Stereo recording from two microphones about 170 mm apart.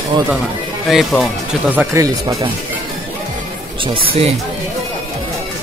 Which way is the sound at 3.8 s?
30° right (ahead or behind).